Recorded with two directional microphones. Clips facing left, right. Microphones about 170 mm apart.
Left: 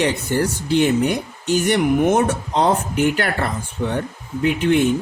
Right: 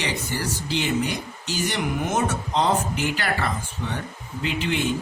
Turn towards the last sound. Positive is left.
turn(degrees=55)  # may be behind; listen again after turning